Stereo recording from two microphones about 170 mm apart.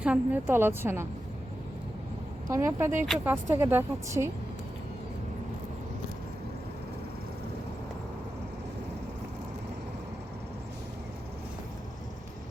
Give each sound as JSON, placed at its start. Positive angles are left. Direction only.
{"t": 0.0, "sound": "a woman's voice", "side_deg": -10}
{"t": 2.5, "sound": "a woman's voice", "side_deg": -15}